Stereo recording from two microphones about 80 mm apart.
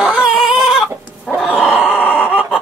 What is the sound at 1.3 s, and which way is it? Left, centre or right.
Groan, centre.